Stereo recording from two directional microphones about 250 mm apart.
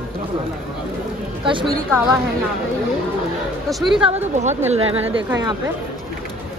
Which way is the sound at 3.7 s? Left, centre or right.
Centre.